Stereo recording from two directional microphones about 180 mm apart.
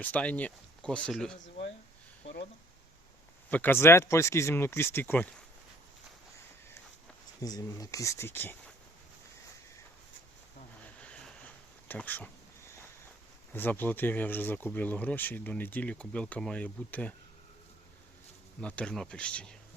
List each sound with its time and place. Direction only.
0.0 s speech: 10° left (ahead or behind)
3.5 s speech: 10° left (ahead or behind)
7.4 s speech: 20° left (ahead or behind)
11.0 s a sound: 5° left (ahead or behind)
13.5 s speech: 10° left (ahead or behind)
18.6 s speech: 5° left (ahead or behind)